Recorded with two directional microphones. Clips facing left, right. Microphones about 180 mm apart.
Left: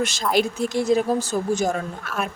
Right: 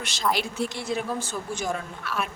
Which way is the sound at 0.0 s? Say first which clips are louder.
Left 6 dB; 45° left (ahead or behind).